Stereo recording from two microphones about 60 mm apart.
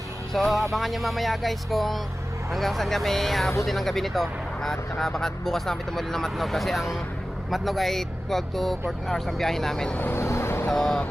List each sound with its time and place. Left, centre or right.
0.3 s speech: centre
10.2 s vehicle: left
10.7 s speech: centre